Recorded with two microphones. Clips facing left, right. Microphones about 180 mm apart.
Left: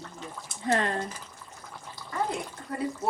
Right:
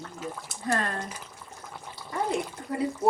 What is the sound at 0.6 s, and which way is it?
Speech, 20° left (ahead or behind).